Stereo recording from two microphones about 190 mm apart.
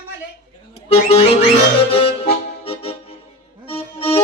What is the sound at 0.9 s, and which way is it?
Music, 30° left (ahead or behind).